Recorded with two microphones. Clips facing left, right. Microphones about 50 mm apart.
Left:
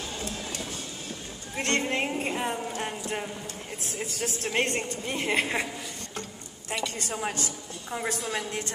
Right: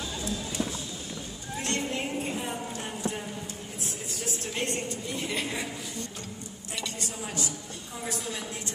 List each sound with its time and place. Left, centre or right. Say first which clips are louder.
1.6 s music: left 4 dB; left
4.2 s a woman's voice: left 5 dB; left
7.0 s a woman's voice: left 3 dB; left